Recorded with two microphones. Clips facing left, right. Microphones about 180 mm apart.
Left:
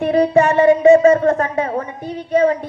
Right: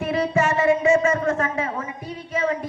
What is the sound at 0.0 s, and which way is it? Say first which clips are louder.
Music: left 8 dB; 35° left (ahead or behind).